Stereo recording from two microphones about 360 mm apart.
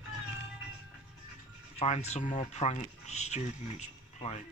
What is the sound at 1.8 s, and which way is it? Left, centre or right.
Speech, centre.